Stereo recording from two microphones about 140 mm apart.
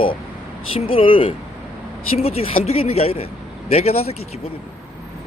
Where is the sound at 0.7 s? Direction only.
40° left (ahead or behind).